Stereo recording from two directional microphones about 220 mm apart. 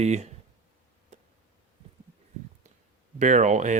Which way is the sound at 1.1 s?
30° right (ahead or behind).